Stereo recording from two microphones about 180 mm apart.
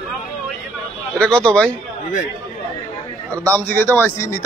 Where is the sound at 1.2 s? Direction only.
5° left (ahead or behind).